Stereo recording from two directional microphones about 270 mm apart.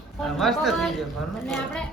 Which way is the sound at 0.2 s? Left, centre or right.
Centre.